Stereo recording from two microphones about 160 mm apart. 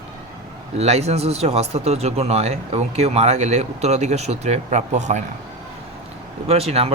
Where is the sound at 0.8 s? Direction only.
40° right (ahead or behind).